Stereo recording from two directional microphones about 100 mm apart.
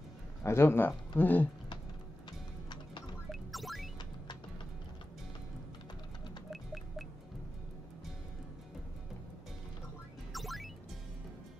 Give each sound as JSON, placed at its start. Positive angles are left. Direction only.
{"t": 0.4, "sound": "speech", "side_deg": 25}
{"t": 3.3, "sound": "music", "side_deg": 0}
{"t": 6.5, "sound": "a sound", "side_deg": 0}
{"t": 10.3, "sound": "music", "side_deg": 0}